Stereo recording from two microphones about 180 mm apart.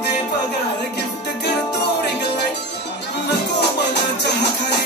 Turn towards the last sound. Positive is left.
turn(degrees=65)  # may be behind; listen again after turning